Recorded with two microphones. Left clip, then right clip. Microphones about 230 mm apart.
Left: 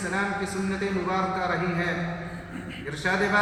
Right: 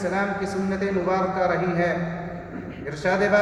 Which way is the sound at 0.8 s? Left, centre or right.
Centre.